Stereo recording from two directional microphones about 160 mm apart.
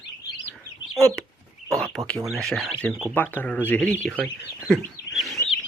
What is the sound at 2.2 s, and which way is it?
Speech, centre (ahead or behind).